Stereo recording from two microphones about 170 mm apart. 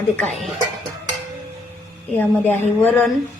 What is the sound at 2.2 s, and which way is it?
Speech, 10° left (ahead or behind).